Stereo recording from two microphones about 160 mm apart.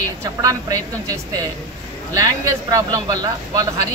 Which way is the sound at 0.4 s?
20° right (ahead or behind).